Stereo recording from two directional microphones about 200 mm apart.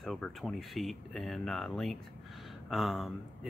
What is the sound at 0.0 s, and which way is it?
Speech, centre (ahead or behind).